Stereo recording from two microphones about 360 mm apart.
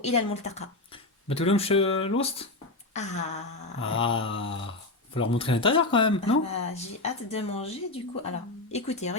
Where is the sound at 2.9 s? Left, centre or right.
Centre.